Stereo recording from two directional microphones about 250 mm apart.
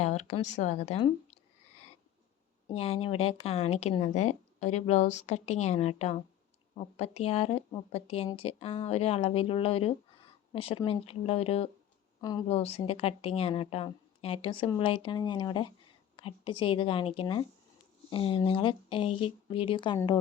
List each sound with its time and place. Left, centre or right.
0.0 s speech: left
2.7 s a woman's voice: left